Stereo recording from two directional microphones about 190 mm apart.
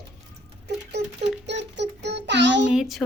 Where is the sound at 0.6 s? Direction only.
60° right (ahead or behind).